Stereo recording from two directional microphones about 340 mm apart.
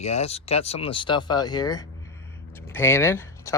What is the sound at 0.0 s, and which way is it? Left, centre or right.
Speech, centre.